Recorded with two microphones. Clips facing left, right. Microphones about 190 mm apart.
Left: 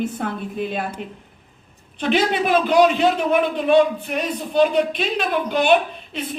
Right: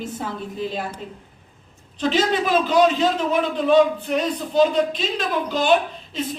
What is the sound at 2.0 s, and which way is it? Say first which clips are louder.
A woman's voice: left 1 dB; 60° left (ahead or behind).